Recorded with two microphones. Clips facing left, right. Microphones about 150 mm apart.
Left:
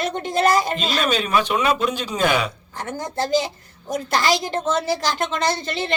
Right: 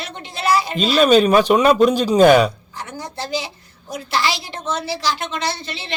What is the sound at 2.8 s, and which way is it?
A woman's voice, 50° left (ahead or behind).